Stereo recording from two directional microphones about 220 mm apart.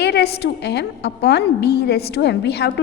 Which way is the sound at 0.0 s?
45° left (ahead or behind).